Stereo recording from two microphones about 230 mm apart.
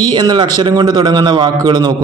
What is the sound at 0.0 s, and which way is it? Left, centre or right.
A man's voice, centre.